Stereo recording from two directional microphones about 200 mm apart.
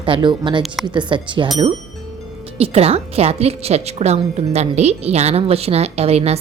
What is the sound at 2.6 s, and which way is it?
A woman's voice, 30° right (ahead or behind).